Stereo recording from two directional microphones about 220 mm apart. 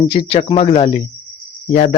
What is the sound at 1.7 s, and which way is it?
Speech, 35° left (ahead or behind).